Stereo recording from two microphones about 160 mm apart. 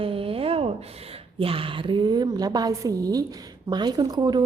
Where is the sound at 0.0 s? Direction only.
35° right (ahead or behind).